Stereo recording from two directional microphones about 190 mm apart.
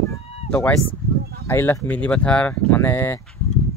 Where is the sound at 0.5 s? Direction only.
5° left (ahead or behind).